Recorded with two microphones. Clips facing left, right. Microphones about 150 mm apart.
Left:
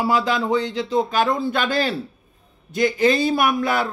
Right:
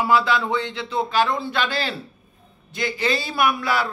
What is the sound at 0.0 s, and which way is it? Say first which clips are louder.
A man's voice: even; 40° left (ahead or behind).